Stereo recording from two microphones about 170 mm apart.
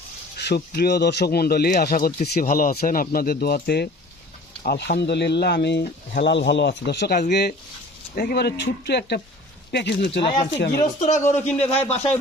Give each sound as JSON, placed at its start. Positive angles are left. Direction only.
{"t": 0.3, "sound": "speech", "side_deg": 70}
{"t": 11.5, "sound": "a man's voice", "side_deg": 40}